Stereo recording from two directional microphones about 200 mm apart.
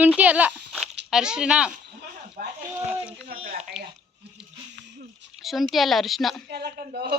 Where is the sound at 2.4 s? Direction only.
40° right (ahead or behind).